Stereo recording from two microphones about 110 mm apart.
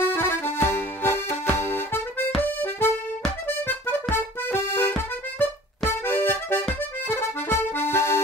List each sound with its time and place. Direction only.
0.0 s accordion: 20° left (ahead or behind)